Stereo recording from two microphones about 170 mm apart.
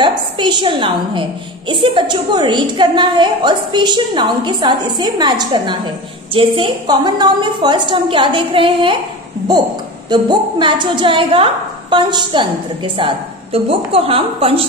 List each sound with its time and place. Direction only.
0.0 s a woman's voice: 25° right (ahead or behind)
10.0 s a woman's voice: 25° right (ahead or behind)